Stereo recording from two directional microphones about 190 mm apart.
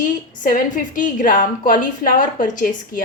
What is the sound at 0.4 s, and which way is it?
A woman's voice, 45° left (ahead or behind).